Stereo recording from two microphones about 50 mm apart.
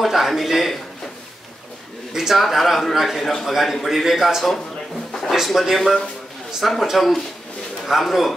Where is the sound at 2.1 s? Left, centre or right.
Centre.